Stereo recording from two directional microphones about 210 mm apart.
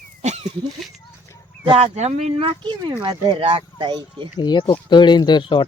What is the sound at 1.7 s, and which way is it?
Speech, 30° right (ahead or behind).